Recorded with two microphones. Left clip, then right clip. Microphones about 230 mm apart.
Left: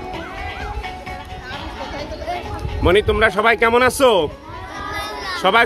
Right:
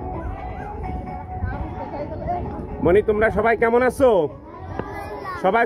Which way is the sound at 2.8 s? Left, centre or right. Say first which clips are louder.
Left 2 dB; centre.